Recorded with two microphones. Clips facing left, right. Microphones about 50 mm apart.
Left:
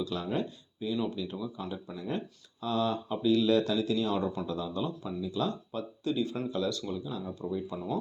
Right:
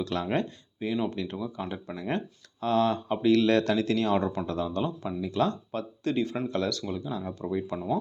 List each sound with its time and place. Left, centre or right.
0.0 s speech: right
2.0 s speech: right
5.2 s speech: right
7.1 s speech: right
7.4 s speech: right